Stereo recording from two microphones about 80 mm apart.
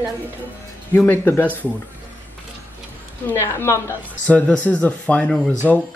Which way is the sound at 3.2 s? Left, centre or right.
Left.